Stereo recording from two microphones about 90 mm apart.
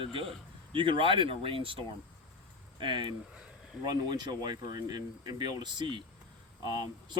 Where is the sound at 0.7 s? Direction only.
70° right (ahead or behind); by 1.8 s 90° right.